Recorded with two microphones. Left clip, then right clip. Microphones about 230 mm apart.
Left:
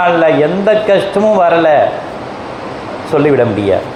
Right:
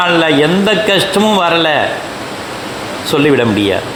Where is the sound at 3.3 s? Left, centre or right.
Right.